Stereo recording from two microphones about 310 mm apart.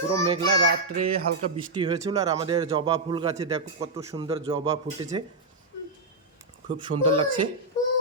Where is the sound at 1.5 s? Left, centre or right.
Centre.